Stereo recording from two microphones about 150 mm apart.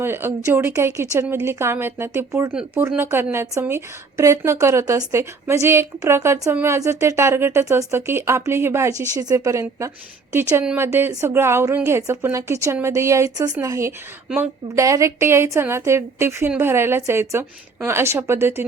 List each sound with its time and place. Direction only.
0.0 s a woman's voice: 15° right (ahead or behind)